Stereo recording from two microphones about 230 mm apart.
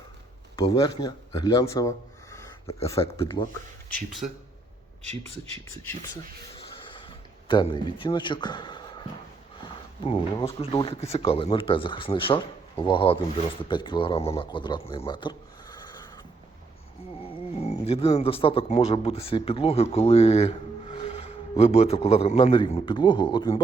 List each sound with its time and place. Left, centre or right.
0.7 s speech: centre
2.3 s a sound: centre
3.4 s speech: left
3.9 s speech: centre
7.4 s speech: left
17.2 s speech: left